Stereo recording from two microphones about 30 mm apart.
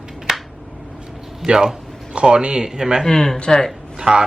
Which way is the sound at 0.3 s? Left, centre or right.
Centre.